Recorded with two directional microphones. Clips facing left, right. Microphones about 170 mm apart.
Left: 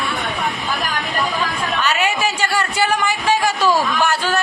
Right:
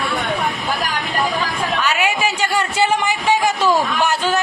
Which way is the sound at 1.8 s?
15° right (ahead or behind).